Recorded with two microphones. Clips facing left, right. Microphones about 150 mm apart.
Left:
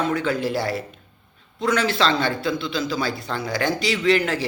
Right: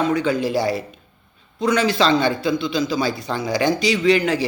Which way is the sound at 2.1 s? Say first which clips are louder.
Right 4 dB; 20° right (ahead or behind).